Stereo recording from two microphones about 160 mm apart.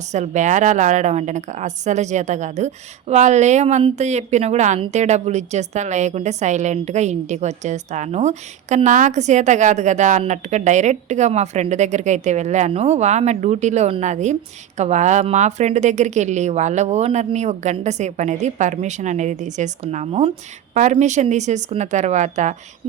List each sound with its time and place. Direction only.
0.1 s a woman's voice: 50° right (ahead or behind)